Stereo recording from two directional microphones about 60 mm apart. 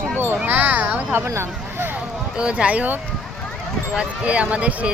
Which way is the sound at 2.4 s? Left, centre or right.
Centre.